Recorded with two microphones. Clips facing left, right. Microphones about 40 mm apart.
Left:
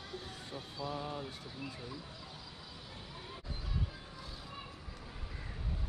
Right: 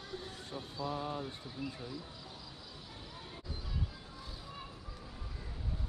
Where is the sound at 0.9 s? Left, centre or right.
Right.